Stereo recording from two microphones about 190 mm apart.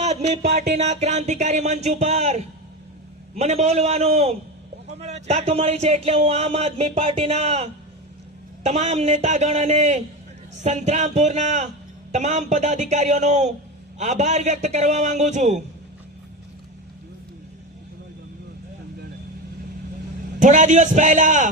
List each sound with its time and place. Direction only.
0.0 s a sound: 35° right (ahead or behind)
0.8 s speech: 35° right (ahead or behind)
20.4 s speech: 40° right (ahead or behind)